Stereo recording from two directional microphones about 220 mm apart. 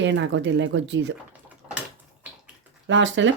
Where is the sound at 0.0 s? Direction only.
55° right (ahead or behind).